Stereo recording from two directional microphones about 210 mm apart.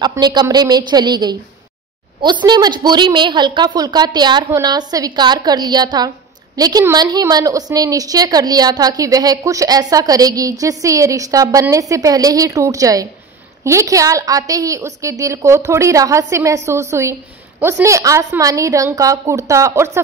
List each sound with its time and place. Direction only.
0.0 s a woman's voice: 20° right (ahead or behind)